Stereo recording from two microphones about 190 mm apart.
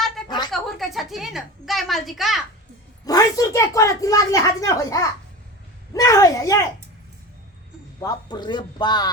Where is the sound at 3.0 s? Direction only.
20° left (ahead or behind).